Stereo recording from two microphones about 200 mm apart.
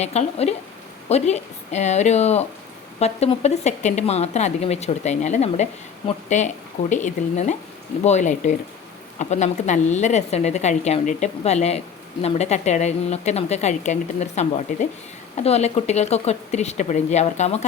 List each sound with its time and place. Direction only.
0.0 s a woman's voice: 35° left (ahead or behind)